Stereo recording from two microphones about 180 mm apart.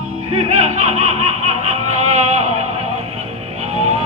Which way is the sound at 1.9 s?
35° right (ahead or behind).